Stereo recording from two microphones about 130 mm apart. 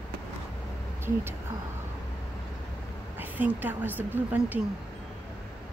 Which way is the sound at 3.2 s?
15° right (ahead or behind).